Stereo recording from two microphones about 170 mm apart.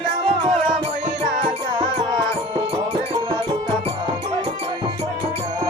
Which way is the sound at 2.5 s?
30° right (ahead or behind).